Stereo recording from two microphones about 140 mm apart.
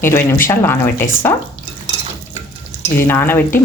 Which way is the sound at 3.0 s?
15° left (ahead or behind).